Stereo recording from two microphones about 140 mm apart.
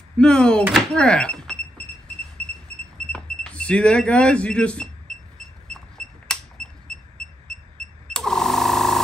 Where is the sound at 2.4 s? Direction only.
50° right (ahead or behind).